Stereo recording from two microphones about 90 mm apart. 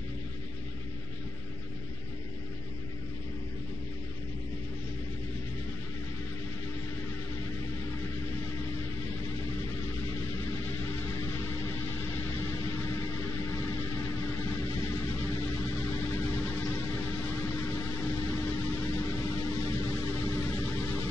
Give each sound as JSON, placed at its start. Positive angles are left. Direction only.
{"t": 11.4, "sound": "mains hum", "side_deg": 25}
{"t": 16.7, "sound": "hum", "side_deg": 20}